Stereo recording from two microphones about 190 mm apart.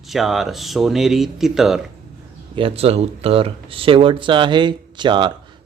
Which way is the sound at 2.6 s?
30° right (ahead or behind).